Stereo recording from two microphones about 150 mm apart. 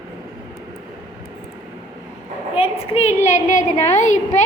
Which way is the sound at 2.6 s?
40° left (ahead or behind).